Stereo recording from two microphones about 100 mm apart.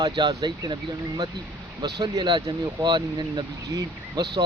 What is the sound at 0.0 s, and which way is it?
Speech, 45° right (ahead or behind).